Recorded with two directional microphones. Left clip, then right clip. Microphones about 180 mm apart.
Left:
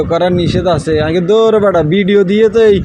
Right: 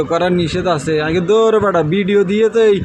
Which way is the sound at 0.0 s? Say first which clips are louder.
Left 3 dB; 10° left (ahead or behind).